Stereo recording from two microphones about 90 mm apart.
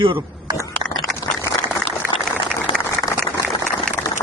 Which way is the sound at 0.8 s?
50° right (ahead or behind).